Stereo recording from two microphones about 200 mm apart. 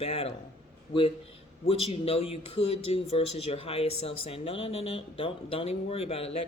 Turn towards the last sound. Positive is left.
turn(degrees=30)  # may be behind; listen again after turning